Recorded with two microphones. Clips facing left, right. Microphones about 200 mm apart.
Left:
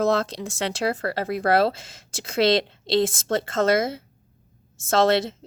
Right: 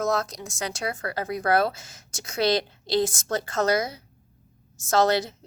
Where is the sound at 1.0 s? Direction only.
25° left (ahead or behind).